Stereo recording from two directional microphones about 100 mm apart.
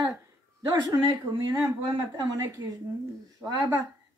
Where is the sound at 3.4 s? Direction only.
20° right (ahead or behind).